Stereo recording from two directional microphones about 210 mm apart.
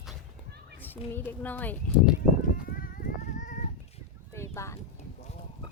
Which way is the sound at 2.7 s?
45° left (ahead or behind).